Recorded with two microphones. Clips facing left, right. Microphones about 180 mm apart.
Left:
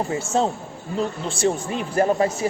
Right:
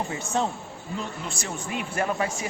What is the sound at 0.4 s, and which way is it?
A man's voice, 35° left (ahead or behind).